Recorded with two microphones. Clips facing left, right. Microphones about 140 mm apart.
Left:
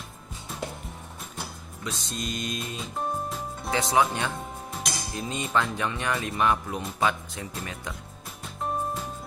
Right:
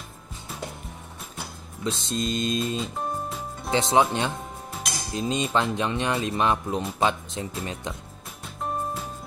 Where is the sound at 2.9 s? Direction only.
Centre (ahead or behind).